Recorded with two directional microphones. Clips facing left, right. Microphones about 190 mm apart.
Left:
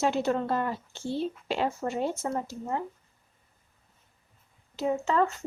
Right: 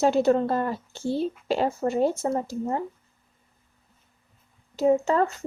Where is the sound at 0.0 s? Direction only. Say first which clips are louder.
Right 6 dB; 35° right (ahead or behind).